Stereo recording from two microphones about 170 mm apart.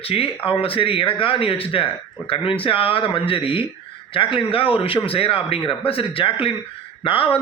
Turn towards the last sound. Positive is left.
turn(degrees=30)  # may be behind; listen again after turning